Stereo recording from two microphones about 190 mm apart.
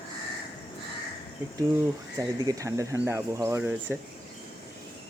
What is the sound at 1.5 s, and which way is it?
Speech, 15° right (ahead or behind).